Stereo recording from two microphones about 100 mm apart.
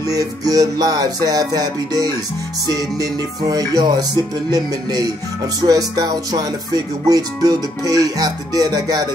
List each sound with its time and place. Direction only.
0.1 s music: 35° right (ahead or behind)